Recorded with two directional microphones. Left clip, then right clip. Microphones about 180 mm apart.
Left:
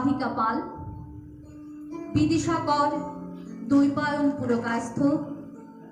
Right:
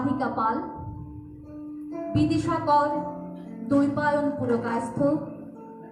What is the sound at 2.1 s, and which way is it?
Music, 45° right (ahead or behind).